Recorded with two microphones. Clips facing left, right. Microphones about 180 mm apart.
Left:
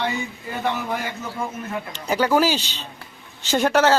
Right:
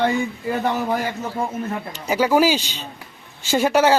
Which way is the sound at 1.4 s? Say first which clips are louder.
Right 3 dB; 35° right (ahead or behind).